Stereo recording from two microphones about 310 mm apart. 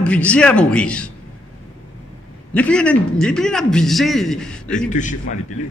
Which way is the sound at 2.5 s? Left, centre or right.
Centre.